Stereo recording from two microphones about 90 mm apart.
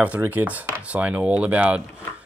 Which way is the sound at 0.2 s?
20° right (ahead or behind).